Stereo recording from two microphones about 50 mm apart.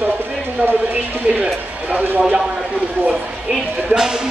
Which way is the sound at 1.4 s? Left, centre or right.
Right.